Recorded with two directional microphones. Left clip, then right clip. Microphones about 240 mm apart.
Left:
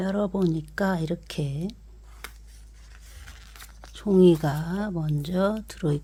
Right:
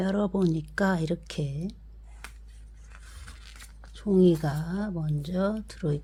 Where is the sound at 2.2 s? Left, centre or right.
Left.